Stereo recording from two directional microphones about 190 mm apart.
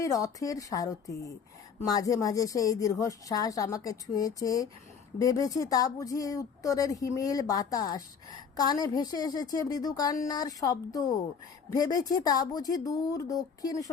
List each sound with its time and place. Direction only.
0.0 s a woman's voice: 20° left (ahead or behind)